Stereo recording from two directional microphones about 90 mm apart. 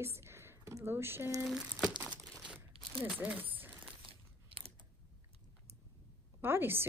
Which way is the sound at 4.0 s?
90° right.